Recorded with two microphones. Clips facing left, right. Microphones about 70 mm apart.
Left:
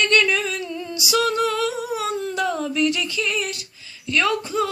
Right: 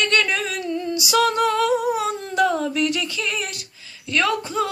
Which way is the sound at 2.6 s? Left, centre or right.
Right.